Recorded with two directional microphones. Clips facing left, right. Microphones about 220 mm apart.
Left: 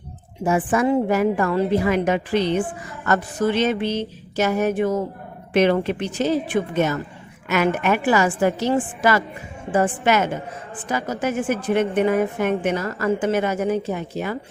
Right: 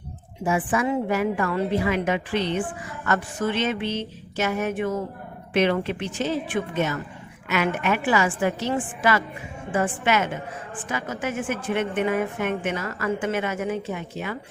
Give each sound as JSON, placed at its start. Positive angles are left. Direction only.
{"t": 0.4, "sound": "a woman's voice", "side_deg": 40}